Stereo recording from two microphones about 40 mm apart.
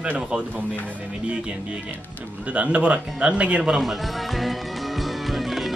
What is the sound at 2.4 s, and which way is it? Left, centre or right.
A man's voice, right.